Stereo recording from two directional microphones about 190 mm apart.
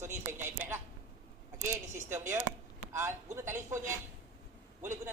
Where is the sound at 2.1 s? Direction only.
15° right (ahead or behind).